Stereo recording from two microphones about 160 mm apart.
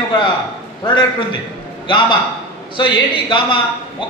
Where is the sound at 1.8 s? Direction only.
30° left (ahead or behind).